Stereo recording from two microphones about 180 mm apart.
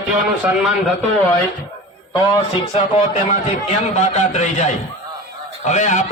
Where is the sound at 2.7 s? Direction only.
40° left (ahead or behind).